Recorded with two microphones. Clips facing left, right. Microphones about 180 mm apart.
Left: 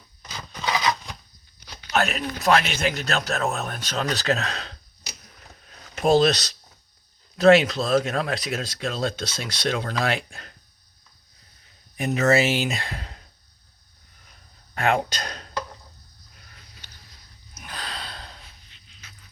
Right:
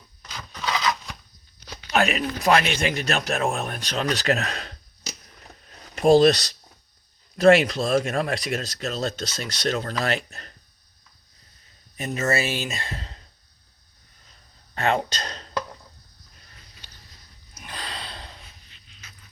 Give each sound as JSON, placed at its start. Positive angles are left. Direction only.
{"t": 0.6, "sound": "a sound", "side_deg": 20}
{"t": 1.9, "sound": "speech", "side_deg": -15}
{"t": 2.4, "sound": "speech", "side_deg": 0}
{"t": 5.9, "sound": "speech", "side_deg": 0}
{"t": 11.9, "sound": "speech", "side_deg": 15}
{"t": 14.8, "sound": "speech", "side_deg": 10}
{"t": 17.5, "sound": "gasp", "side_deg": 0}